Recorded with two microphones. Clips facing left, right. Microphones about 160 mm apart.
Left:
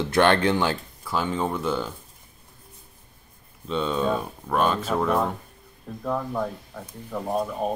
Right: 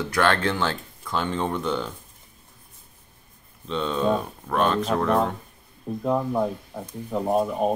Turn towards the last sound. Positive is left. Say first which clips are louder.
# right 4 dB
turn(degrees=-20)  # may be behind; listen again after turning